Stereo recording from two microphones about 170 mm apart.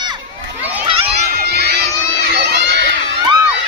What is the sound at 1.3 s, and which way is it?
Crowd, 70° right (ahead or behind).